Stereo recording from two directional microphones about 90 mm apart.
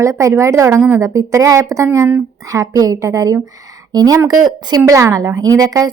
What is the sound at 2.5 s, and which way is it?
Speech, 40° right (ahead or behind).